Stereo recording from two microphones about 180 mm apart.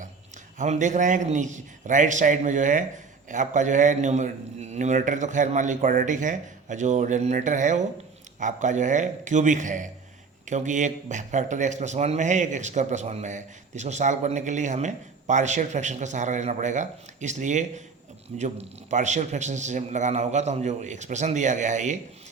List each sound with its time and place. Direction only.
0.6 s a man's voice: 45° right (ahead or behind)